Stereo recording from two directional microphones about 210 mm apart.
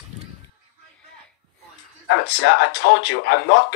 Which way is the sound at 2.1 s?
55° left (ahead or behind).